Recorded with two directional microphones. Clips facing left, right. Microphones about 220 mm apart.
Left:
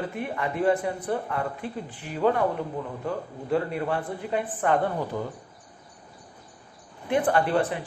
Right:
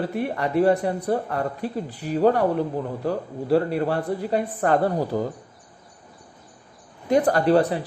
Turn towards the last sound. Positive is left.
turn(degrees=-35)  # may be behind; listen again after turning